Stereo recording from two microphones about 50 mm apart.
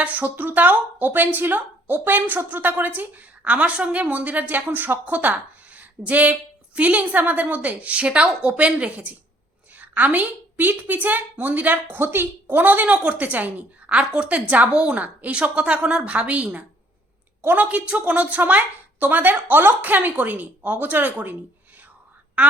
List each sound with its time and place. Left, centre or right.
0.0 s a woman's voice: right
11.9 s a woman's voice: right
14.0 s a woman's voice: centre
17.4 s a woman's voice: right
17.7 s a woman's voice: right
19.7 s a woman's voice: right